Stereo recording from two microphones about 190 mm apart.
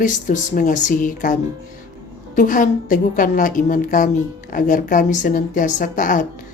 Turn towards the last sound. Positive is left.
turn(degrees=45)  # may be behind; listen again after turning